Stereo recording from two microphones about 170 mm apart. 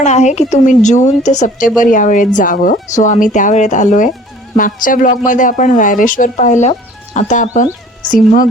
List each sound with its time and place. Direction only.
0.0 s speech: 45° left (ahead or behind)